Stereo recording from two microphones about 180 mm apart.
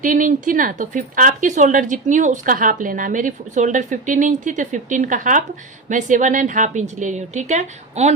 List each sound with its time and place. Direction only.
0.0 s speech: 45° right (ahead or behind)